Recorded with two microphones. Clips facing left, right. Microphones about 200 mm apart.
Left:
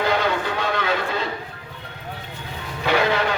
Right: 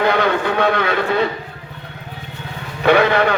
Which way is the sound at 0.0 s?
60° right (ahead or behind).